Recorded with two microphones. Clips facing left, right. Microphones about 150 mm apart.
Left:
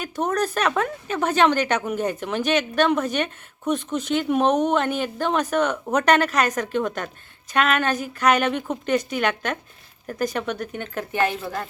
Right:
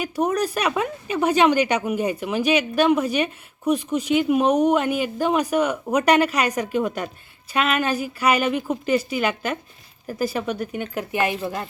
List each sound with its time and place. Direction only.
0.0 s a woman's voice: 10° right (ahead or behind)